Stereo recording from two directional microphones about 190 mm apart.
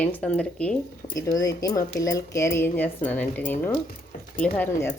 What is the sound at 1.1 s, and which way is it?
Speech, 20° left (ahead or behind).